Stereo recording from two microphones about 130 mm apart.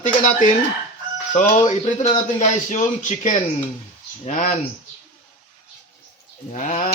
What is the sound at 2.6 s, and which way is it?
Speech, 70° left (ahead or behind).